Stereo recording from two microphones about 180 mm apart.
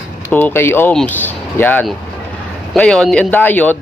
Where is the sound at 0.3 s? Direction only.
10° left (ahead or behind).